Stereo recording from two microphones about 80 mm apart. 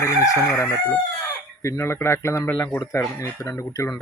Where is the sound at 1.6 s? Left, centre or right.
Left.